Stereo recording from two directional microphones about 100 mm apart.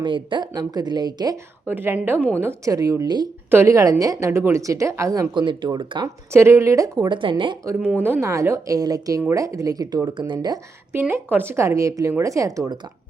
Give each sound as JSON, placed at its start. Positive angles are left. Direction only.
{"t": 0.0, "sound": "a woman's voice", "side_deg": -50}
{"t": 1.6, "sound": "speech", "side_deg": -20}
{"t": 3.5, "sound": "speech", "side_deg": -25}
{"t": 5.3, "sound": "a woman's voice", "side_deg": -50}
{"t": 6.3, "sound": "speech", "side_deg": -25}
{"t": 7.1, "sound": "a woman's voice", "side_deg": -55}
{"t": 7.8, "sound": "speech", "side_deg": -20}
{"t": 8.2, "sound": "speech", "side_deg": -30}
{"t": 11.1, "sound": "speech", "side_deg": -20}